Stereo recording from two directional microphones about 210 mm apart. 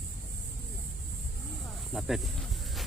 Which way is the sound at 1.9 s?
Centre (ahead or behind).